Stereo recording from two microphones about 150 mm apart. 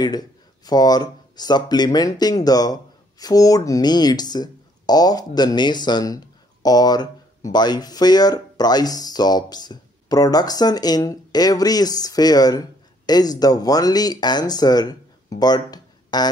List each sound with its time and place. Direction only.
0.0 s speech: 25° left (ahead or behind)